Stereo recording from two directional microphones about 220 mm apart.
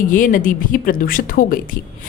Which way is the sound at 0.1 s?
40° left (ahead or behind).